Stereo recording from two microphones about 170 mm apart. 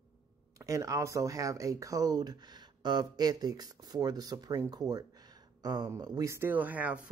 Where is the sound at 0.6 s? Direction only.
20° right (ahead or behind).